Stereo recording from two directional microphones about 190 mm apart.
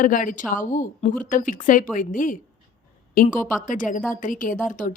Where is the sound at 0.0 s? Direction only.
45° left (ahead or behind).